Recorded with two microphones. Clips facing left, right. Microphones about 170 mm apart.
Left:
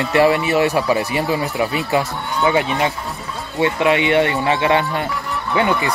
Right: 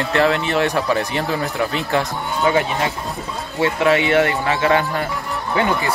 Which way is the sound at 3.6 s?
20° left (ahead or behind).